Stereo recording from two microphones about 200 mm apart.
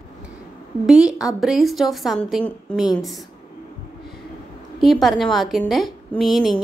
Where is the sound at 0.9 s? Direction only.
5° right (ahead or behind).